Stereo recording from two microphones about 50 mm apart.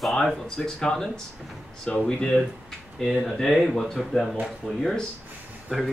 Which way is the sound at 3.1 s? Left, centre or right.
Centre.